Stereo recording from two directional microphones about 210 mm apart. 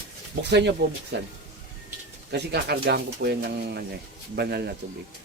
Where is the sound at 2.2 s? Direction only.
50° right (ahead or behind).